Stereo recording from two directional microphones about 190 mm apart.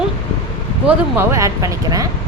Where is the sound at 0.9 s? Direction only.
15° right (ahead or behind).